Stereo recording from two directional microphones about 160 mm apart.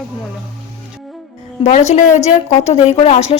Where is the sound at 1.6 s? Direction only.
45° left (ahead or behind).